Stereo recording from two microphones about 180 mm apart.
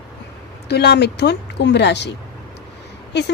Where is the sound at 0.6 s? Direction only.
65° left (ahead or behind).